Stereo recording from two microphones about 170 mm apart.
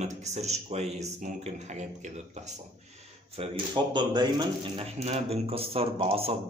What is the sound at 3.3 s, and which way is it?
Speech, 25° right (ahead or behind).